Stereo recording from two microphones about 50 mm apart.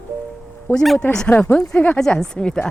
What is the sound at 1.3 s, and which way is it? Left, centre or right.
Speech, left.